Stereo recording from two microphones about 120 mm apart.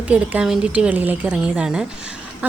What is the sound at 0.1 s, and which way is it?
A woman's voice, 5° right (ahead or behind).